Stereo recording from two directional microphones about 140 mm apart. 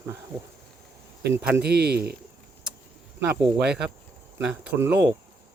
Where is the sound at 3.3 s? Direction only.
5° right (ahead or behind).